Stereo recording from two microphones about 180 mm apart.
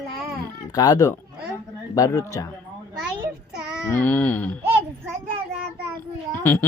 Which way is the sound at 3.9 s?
10° left (ahead or behind).